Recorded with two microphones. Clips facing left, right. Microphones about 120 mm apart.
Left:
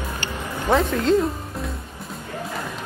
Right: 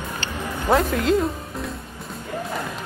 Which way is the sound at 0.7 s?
5° right (ahead or behind).